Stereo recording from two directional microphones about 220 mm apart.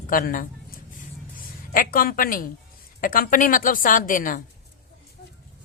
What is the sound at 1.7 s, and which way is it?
Speech, 40° left (ahead or behind).